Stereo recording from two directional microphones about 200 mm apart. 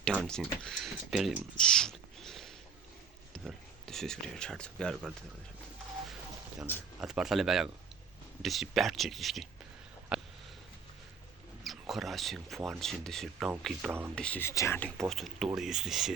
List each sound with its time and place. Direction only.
0.3 s speech: 5° left (ahead or behind)
7.0 s speech: centre (ahead or behind)
10.1 s sniff: 5° right (ahead or behind)
11.6 s speech: centre (ahead or behind)
14.2 s speech: 5° left (ahead or behind)